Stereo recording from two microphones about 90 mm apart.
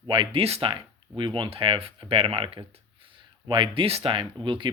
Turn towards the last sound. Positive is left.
turn(degrees=-65)  # may be behind; listen again after turning